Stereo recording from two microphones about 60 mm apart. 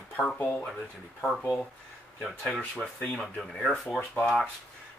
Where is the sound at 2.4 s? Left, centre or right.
Left.